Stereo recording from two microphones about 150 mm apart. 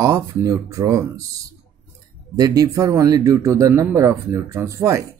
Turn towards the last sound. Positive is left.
turn(degrees=-20)  # may be behind; listen again after turning